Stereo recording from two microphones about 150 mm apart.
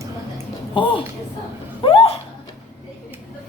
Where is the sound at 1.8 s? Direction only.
40° left (ahead or behind).